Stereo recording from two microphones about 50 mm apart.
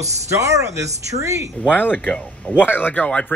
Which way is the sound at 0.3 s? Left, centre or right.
Right.